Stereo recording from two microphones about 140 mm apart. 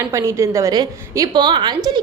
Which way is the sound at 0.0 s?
20° right (ahead or behind).